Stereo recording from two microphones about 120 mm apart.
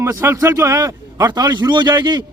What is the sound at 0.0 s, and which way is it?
A man's voice, 20° right (ahead or behind).